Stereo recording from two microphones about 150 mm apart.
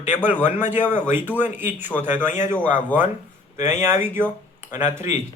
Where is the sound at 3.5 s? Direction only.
50° left (ahead or behind).